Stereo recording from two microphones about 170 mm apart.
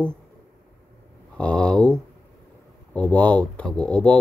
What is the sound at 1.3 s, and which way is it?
Speech, 5° left (ahead or behind).